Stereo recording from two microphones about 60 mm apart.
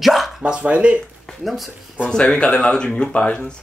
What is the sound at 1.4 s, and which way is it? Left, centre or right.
Speech, centre.